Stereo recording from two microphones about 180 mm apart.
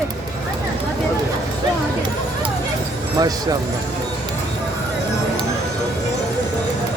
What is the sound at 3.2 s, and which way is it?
Speech, 20° right (ahead or behind).